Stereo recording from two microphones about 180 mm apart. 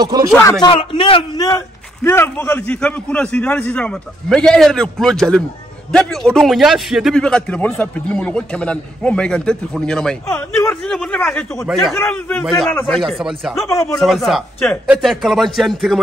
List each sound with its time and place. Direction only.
0.0 s speech: 20° right (ahead or behind)
0.4 s a man's voice: 20° left (ahead or behind); by 10.1 s 5° left (ahead or behind)
10.2 s a man's voice: 15° left (ahead or behind); by 16.0 s centre (ahead or behind)